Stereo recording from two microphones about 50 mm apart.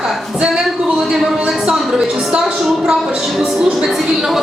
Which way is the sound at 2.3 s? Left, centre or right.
Right.